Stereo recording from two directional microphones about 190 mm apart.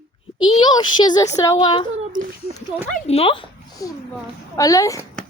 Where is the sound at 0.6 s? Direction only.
25° left (ahead or behind).